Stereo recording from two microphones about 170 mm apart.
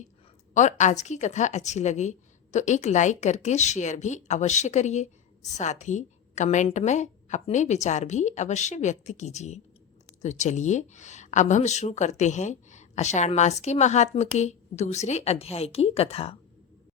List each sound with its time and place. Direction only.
0.5 s speech: 45° left (ahead or behind)